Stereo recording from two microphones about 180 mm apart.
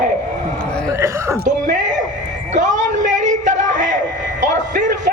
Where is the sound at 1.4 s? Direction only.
45° right (ahead or behind).